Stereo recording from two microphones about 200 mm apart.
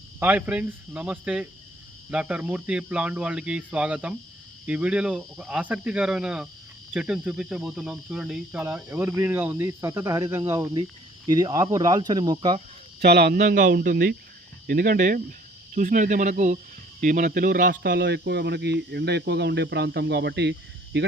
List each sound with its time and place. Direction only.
0.2 s speech: 10° right (ahead or behind); by 12.6 s 25° right (ahead or behind)
13.0 s speech: 55° right (ahead or behind)